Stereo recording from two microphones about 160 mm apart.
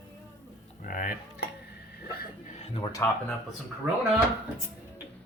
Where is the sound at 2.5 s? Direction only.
40° left (ahead or behind).